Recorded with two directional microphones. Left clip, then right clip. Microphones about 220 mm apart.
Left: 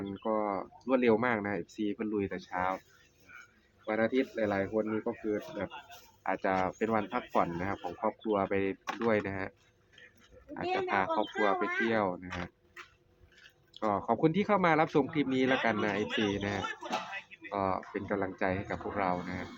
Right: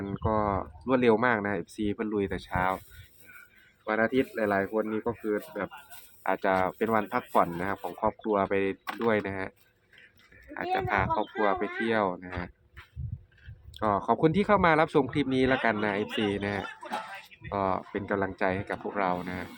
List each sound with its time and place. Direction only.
0.0 s speech: 30° right (ahead or behind)
3.8 s speech: 25° right (ahead or behind)
8.8 s speech: 40° right (ahead or behind)
9.0 s speech: 20° right (ahead or behind)
10.5 s speech: 20° right (ahead or behind)
13.7 s speech: 25° right (ahead or behind)
16.0 s speech: 15° right (ahead or behind)